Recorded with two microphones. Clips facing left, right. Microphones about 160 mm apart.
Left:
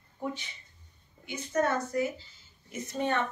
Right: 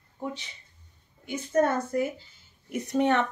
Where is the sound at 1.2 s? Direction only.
50° right (ahead or behind).